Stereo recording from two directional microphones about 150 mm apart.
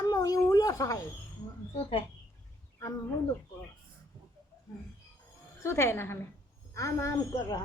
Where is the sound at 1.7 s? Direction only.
35° left (ahead or behind).